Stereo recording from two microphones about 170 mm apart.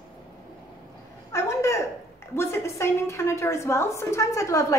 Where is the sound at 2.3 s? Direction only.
15° left (ahead or behind).